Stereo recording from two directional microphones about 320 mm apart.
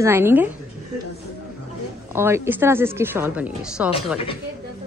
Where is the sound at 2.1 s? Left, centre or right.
Centre.